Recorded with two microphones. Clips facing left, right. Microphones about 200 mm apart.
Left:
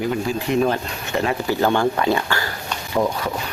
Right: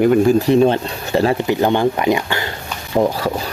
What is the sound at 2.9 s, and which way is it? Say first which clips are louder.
Speech: right 5 dB; 30° right (ahead or behind).